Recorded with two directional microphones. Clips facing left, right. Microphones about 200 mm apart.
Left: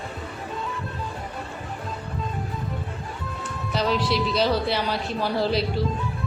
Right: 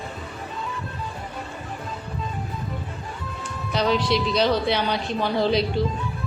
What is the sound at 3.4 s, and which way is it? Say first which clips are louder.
A woman's voice: right 2 dB; centre (ahead or behind).